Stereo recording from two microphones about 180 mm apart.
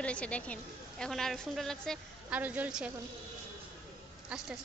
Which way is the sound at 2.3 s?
10° right (ahead or behind).